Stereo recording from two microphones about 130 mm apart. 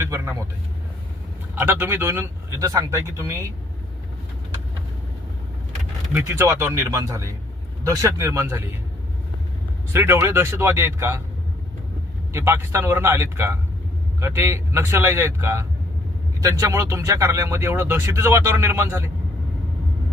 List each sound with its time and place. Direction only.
0.0 s speech: 20° right (ahead or behind)
1.5 s speech: 15° right (ahead or behind)
6.1 s speech: 20° right (ahead or behind)
9.9 s speech: 20° right (ahead or behind)
12.3 s speech: 20° right (ahead or behind)